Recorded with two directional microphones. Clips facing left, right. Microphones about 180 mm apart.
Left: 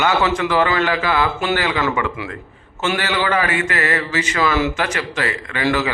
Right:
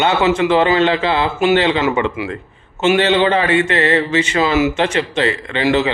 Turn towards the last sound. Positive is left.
turn(degrees=-25)  # may be behind; listen again after turning